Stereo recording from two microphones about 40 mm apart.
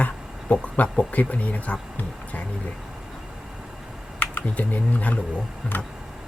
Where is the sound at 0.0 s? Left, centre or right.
Left.